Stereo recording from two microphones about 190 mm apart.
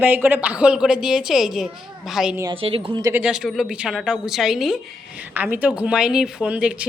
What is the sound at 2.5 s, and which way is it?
Speech, 30° right (ahead or behind).